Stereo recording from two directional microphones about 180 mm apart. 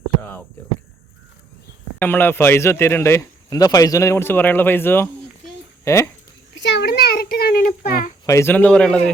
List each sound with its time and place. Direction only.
0.2 s a sound: 10° left (ahead or behind)
2.0 s speech: 10° left (ahead or behind)
6.5 s a child's voice: 80° left; by 8.1 s 50° left (ahead or behind)
8.3 s speech: 15° left (ahead or behind)